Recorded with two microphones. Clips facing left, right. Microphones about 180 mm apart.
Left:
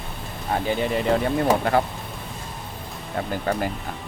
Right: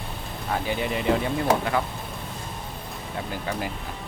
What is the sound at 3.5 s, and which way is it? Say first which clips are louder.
Speech: left 6 dB; 50° left (ahead or behind).